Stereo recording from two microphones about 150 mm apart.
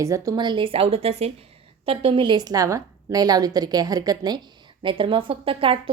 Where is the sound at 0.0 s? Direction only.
20° right (ahead or behind).